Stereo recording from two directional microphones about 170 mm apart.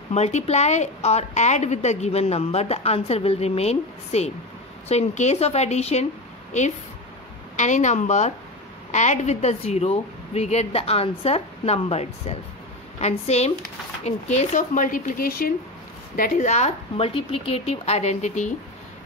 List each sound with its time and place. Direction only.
0.1 s a woman's voice: 40° left (ahead or behind)
7.5 s a woman's voice: 45° left (ahead or behind)
16.2 s a woman's voice: 45° left (ahead or behind)